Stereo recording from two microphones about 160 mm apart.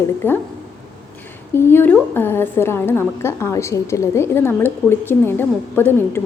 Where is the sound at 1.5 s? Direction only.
15° left (ahead or behind).